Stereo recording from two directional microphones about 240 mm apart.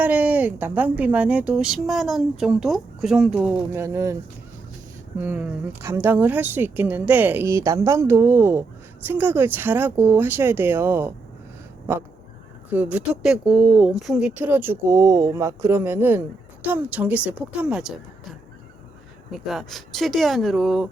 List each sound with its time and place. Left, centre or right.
0.0 s a woman's voice: centre